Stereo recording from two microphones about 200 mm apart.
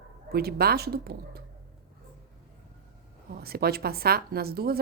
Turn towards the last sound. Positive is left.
turn(degrees=-50)  # may be behind; listen again after turning